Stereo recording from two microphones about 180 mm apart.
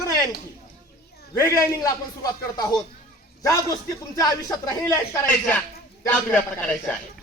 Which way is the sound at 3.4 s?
20° left (ahead or behind).